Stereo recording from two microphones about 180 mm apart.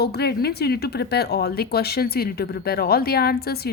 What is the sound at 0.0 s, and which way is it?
A woman's voice, 65° left (ahead or behind).